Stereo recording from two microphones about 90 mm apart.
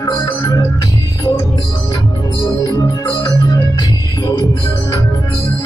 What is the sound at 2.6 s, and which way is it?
Music, 40° left (ahead or behind).